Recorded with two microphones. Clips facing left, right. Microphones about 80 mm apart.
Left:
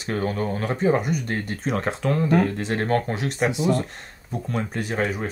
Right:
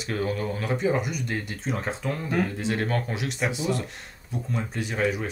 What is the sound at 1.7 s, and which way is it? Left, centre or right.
Speech, left.